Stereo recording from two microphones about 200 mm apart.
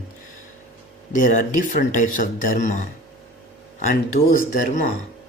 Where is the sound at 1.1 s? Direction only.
40° left (ahead or behind).